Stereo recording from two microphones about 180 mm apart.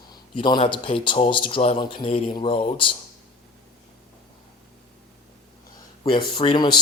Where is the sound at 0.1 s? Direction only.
25° left (ahead or behind).